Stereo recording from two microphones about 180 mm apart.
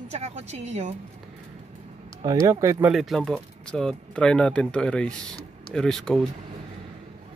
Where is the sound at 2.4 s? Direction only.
15° right (ahead or behind).